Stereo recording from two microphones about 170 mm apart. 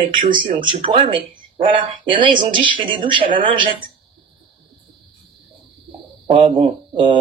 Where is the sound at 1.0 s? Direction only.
50° right (ahead or behind).